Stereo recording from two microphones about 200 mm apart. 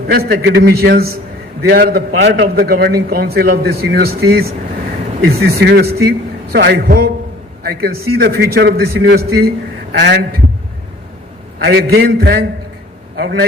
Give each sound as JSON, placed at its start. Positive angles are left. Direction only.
{"t": 0.1, "sound": "a man's voice", "side_deg": -50}
{"t": 10.1, "sound": "a man's voice", "side_deg": -60}
{"t": 11.6, "sound": "a man's voice", "side_deg": -55}